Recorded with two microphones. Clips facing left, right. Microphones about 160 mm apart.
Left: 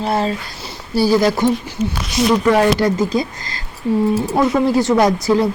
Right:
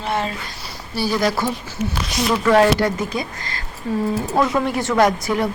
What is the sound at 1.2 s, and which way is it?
Speech, 25° left (ahead or behind).